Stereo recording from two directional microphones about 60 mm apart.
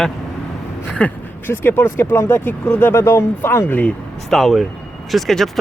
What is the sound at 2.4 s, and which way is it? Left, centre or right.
Speech, left.